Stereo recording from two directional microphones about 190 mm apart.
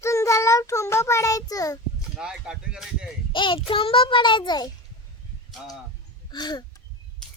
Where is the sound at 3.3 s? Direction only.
25° left (ahead or behind).